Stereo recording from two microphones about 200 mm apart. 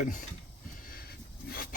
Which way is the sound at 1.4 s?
45° left (ahead or behind).